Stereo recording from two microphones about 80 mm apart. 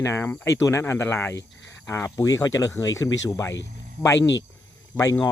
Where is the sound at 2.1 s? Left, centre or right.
Left.